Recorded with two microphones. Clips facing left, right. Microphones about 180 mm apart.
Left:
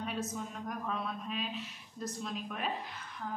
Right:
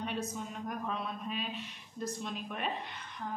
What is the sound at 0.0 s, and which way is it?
Female singing, centre (ahead or behind).